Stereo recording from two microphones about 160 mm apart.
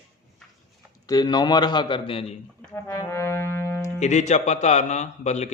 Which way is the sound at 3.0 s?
15° left (ahead or behind).